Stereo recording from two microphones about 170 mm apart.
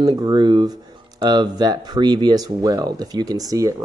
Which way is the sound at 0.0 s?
25° right (ahead or behind).